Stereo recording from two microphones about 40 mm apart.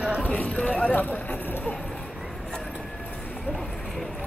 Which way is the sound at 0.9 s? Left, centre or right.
Left.